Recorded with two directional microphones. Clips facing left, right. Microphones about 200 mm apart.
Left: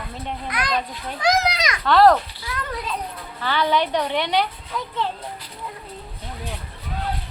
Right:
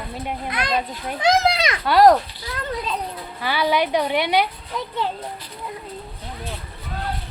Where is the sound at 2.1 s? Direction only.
35° right (ahead or behind).